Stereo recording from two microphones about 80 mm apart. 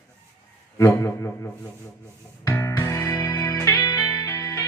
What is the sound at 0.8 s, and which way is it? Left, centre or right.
Speech, left.